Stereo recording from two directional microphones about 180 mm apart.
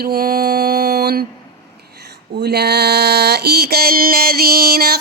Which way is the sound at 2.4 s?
65° right (ahead or behind).